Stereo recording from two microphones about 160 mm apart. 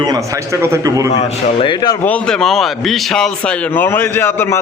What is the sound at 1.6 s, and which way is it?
Speech, 30° left (ahead or behind).